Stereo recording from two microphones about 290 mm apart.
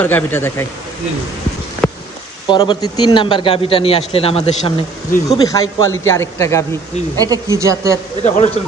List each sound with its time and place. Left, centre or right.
0.0 s a man's voice: centre
2.4 s a man's voice: centre
7.2 s speech: centre
8.2 s a man's voice: left